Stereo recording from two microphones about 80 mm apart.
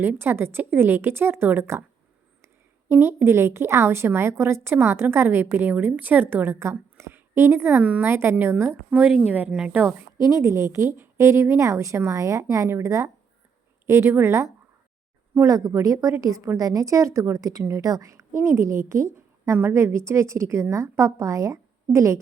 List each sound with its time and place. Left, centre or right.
0.0 s speech: right
2.9 s a woman's voice: right
9.5 s speech: centre
10.2 s a woman's voice: right
15.4 s a woman's voice: right